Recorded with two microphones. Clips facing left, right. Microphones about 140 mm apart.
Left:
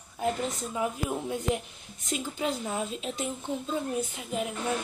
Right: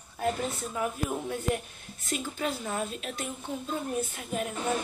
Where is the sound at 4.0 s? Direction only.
15° left (ahead or behind).